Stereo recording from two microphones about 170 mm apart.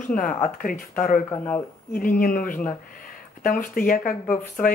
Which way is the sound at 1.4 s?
10° left (ahead or behind).